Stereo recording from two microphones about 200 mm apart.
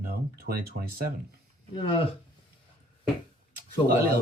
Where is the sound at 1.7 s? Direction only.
25° left (ahead or behind).